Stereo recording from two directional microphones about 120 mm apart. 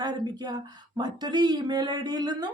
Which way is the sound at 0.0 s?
35° right (ahead or behind).